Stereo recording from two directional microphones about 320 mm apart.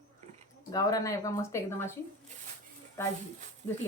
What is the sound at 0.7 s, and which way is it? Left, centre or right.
A woman's voice, centre.